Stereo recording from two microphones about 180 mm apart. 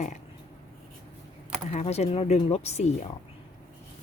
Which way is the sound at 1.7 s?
35° left (ahead or behind).